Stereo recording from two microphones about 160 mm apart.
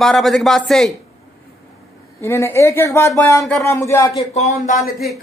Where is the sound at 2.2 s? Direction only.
15° left (ahead or behind).